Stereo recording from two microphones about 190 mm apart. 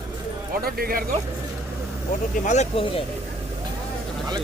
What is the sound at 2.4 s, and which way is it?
Speech, 35° left (ahead or behind).